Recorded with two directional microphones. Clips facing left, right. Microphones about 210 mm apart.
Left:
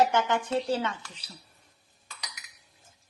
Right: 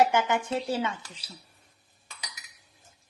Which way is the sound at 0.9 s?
25° right (ahead or behind).